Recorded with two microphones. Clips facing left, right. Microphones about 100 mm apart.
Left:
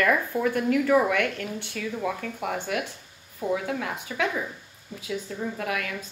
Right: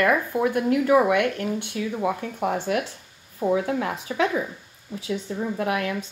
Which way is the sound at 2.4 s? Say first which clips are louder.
Right 5 dB; 35° right (ahead or behind).